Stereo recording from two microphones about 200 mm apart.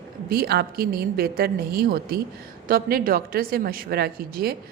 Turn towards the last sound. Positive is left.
turn(degrees=-50)  # may be behind; listen again after turning